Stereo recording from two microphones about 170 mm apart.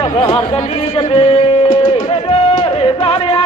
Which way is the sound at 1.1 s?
35° left (ahead or behind).